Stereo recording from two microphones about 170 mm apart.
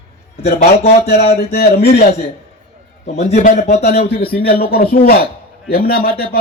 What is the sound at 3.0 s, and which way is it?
Speech, 40° left (ahead or behind).